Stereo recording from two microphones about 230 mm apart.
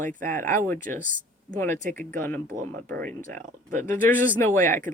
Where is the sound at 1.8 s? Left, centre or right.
Right.